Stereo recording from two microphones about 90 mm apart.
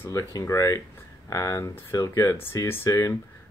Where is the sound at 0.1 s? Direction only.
35° left (ahead or behind).